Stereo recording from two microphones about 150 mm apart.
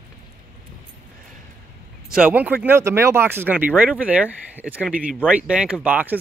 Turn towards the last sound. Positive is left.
turn(degrees=-10)  # may be behind; listen again after turning